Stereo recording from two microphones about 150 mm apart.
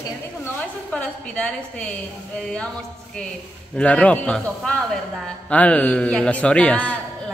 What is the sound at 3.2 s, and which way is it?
A man's voice, 5° left (ahead or behind).